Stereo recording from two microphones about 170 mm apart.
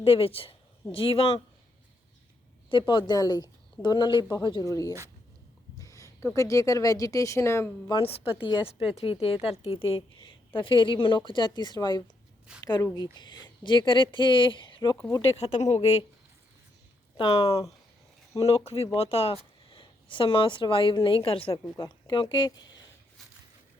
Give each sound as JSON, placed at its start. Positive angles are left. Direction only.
{"t": 0.0, "sound": "speech", "side_deg": 35}
{"t": 2.6, "sound": "a woman's voice", "side_deg": 30}
{"t": 5.8, "sound": "a sound", "side_deg": 20}
{"t": 6.3, "sound": "a woman's voice", "side_deg": 20}
{"t": 7.9, "sound": "a woman's voice", "side_deg": 35}
{"t": 15.4, "sound": "speech", "side_deg": 40}
{"t": 17.2, "sound": "a woman's voice", "side_deg": 25}
{"t": 18.4, "sound": "speech", "side_deg": 35}